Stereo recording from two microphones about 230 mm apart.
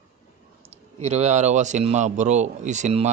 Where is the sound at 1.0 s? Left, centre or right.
Right.